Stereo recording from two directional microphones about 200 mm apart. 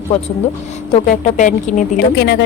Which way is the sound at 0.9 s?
40° left (ahead or behind).